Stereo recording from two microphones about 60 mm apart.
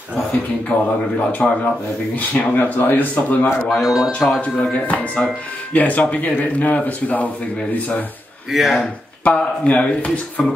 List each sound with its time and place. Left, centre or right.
0.7 s speech: left
2.1 s speech: left
3.6 s speech: centre
4.4 s speech: left
8.5 s speech: centre
9.2 s speech: left